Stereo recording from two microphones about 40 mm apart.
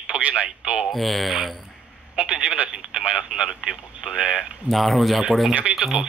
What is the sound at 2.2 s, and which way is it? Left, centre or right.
Speech, right.